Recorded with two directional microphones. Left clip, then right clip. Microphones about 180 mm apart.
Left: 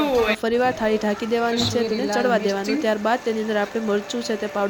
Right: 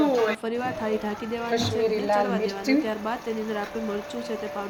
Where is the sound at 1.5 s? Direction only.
60° right (ahead or behind).